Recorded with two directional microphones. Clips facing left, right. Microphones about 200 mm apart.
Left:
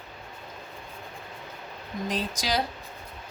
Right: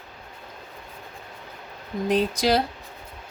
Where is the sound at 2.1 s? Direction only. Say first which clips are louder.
Right 9 dB; 60° right (ahead or behind).